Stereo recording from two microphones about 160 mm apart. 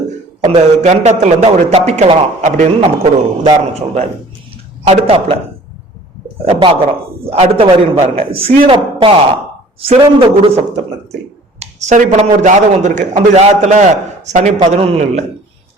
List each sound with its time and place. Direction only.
0.4 s a man's voice: 45° right (ahead or behind)
2.4 s a man's voice: 50° right (ahead or behind)
3.4 s a man's voice: 40° right (ahead or behind)
6.5 s a man's voice: 35° right (ahead or behind)